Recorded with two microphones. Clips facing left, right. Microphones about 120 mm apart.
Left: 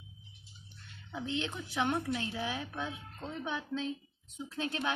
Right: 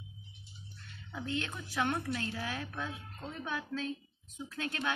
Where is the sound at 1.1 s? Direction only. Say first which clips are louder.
Left 1 dB; 20° left (ahead or behind).